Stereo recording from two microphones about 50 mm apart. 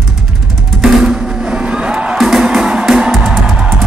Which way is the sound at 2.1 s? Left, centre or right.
Centre.